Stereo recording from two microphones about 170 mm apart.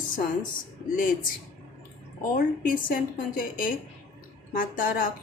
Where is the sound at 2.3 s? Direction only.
55° left (ahead or behind).